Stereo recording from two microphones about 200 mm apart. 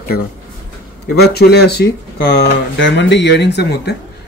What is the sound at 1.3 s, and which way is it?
Speech, 55° left (ahead or behind).